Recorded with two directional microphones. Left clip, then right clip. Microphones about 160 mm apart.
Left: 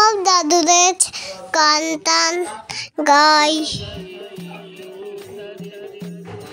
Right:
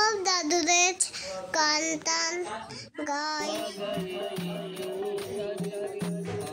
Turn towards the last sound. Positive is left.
turn(degrees=10)  # may be behind; listen again after turning